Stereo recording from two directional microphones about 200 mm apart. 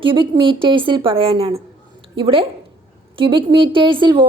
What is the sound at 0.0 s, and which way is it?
A woman's voice, 25° right (ahead or behind).